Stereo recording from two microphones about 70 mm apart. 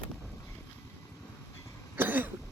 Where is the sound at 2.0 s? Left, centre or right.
Right.